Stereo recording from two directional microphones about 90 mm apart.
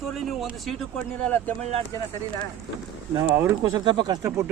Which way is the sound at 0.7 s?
10° left (ahead or behind).